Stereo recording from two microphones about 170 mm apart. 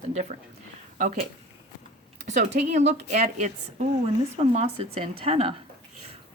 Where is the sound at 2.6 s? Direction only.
45° right (ahead or behind).